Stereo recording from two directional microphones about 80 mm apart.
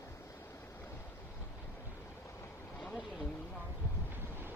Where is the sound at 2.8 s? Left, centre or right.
Centre.